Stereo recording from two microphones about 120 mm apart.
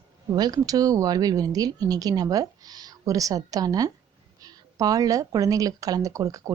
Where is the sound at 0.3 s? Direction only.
30° right (ahead or behind).